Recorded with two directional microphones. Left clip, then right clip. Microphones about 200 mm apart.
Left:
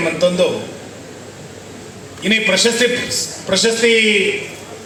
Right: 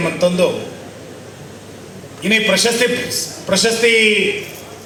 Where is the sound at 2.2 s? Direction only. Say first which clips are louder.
Even; 20° right (ahead or behind).